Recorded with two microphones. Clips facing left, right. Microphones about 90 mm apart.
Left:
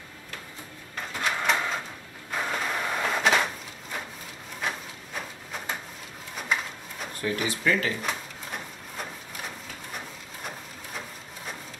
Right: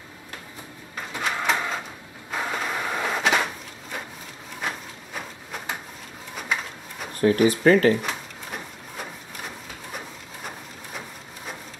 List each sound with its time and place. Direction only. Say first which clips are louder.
1.1 s printer: right 1 dB; 5° right (ahead or behind)
2.3 s vehicle: right 1 dB; 5° right (ahead or behind)
4.6 s printer: right 1 dB; centre (ahead or behind)
7.2 s speech: right 11 dB; 45° right (ahead or behind)
8.0 s a sound: right 1 dB; 5° right (ahead or behind)